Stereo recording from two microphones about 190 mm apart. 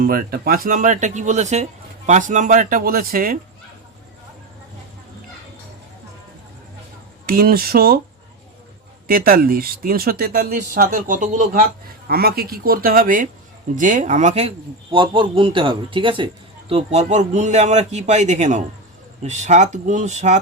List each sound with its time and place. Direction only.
0.0 s speech: 50° right (ahead or behind)
7.3 s speech: 50° right (ahead or behind)
9.0 s speech: 50° right (ahead or behind)
12.0 s a man's voice: 55° right (ahead or behind); by 20.4 s 40° right (ahead or behind)